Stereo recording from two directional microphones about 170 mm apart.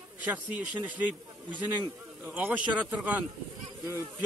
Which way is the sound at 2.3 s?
10° right (ahead or behind).